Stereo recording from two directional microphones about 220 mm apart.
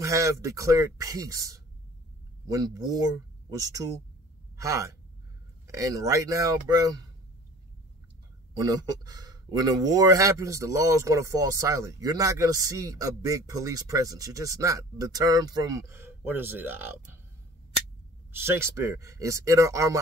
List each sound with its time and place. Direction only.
0.0 s speech: 15° right (ahead or behind)
8.5 s speech: 20° right (ahead or behind)
18.4 s speech: 10° right (ahead or behind)